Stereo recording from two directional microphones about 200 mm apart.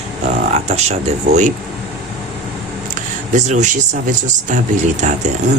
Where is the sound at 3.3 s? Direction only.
35° right (ahead or behind).